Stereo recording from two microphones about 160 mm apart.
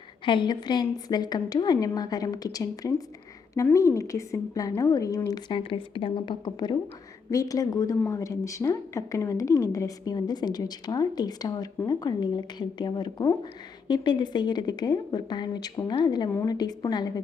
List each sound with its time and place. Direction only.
0.3 s a woman's voice: 30° left (ahead or behind)